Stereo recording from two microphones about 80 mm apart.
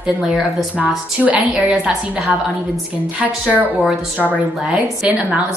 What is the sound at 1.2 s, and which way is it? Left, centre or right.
A woman's voice, centre.